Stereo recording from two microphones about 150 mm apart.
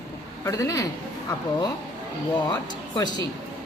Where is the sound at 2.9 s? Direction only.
30° left (ahead or behind).